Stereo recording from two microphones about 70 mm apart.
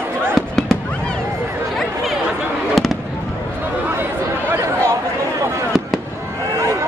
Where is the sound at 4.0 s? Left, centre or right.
Right.